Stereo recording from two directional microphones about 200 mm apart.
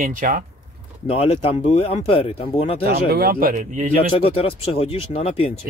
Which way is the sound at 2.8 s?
50° right (ahead or behind).